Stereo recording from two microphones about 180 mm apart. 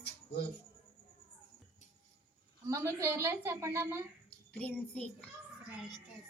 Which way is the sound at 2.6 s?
20° right (ahead or behind).